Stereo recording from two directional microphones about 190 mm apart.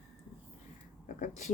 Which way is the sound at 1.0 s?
40° left (ahead or behind).